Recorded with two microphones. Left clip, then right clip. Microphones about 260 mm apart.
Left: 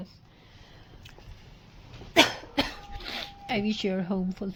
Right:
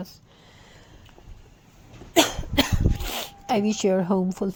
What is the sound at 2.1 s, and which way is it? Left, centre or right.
Cough, centre.